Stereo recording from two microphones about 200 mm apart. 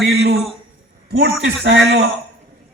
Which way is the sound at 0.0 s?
55° right (ahead or behind).